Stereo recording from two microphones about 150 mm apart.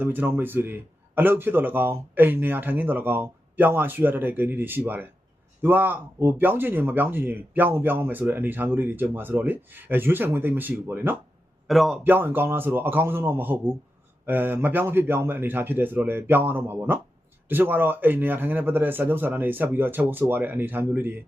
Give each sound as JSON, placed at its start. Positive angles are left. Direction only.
{"t": 0.0, "sound": "speech", "side_deg": -15}
{"t": 11.7, "sound": "a man's voice", "side_deg": 0}
{"t": 12.0, "sound": "speech", "side_deg": -15}